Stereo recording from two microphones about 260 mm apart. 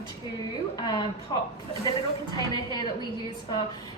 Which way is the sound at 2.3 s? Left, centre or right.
Centre.